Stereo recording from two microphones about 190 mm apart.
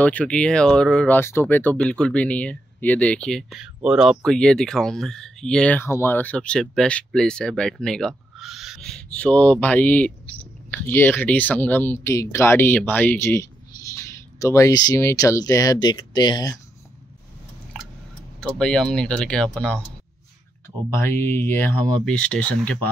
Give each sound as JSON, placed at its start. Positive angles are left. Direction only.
{"t": 0.0, "sound": "speech", "side_deg": 5}
{"t": 18.4, "sound": "speech", "side_deg": 5}
{"t": 20.9, "sound": "speech", "side_deg": 15}